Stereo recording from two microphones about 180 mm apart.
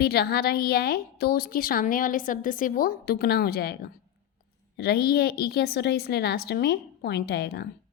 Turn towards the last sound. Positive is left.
turn(degrees=65)  # may be behind; listen again after turning